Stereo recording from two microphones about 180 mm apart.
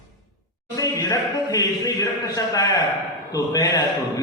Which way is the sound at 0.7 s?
20° left (ahead or behind).